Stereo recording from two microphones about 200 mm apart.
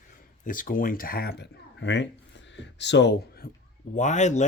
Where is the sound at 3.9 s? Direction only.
35° left (ahead or behind).